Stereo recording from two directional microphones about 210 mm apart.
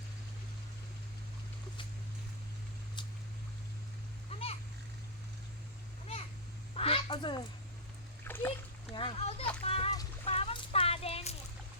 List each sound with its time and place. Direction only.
4.3 s splash: 30° left (ahead or behind)
6.7 s quack: 25° left (ahead or behind)
8.2 s splash: 10° left (ahead or behind)
9.0 s a child's voice: 25° left (ahead or behind)
10.2 s a sound: 25° left (ahead or behind)